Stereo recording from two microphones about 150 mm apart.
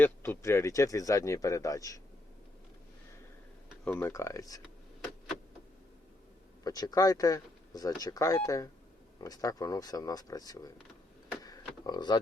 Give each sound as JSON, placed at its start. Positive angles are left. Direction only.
{"t": 0.0, "sound": "speech", "side_deg": 15}
{"t": 3.8, "sound": "speech", "side_deg": 15}
{"t": 6.7, "sound": "speech", "side_deg": 25}
{"t": 11.4, "sound": "a sound", "side_deg": 30}